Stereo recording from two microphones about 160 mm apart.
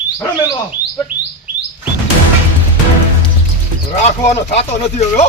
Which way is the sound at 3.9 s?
45° left (ahead or behind).